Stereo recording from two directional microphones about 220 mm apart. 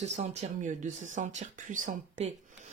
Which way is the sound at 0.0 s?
30° right (ahead or behind).